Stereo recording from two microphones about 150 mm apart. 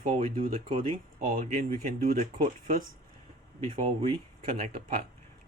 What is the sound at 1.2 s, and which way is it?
Speech, 60° right (ahead or behind).